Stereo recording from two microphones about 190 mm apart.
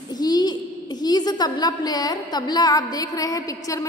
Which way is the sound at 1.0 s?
20° left (ahead or behind).